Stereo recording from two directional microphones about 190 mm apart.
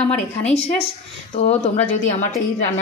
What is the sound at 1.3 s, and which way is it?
Speech, 35° left (ahead or behind).